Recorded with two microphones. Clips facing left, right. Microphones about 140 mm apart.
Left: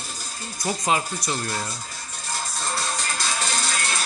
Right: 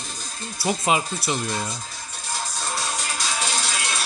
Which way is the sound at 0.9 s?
10° right (ahead or behind).